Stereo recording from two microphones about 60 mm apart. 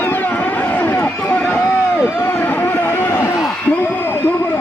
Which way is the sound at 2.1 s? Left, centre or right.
Left.